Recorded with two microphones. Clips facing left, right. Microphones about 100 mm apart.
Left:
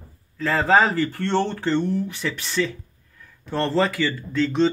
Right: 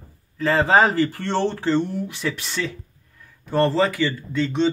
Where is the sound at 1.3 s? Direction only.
15° right (ahead or behind).